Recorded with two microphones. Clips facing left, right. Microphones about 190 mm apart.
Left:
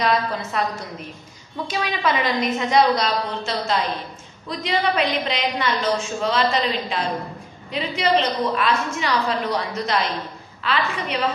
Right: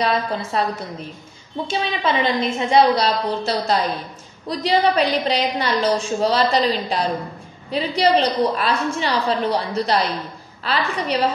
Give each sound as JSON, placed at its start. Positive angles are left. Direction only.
{"t": 0.0, "sound": "a woman's voice", "side_deg": -30}
{"t": 1.7, "sound": "a woman's voice", "side_deg": -25}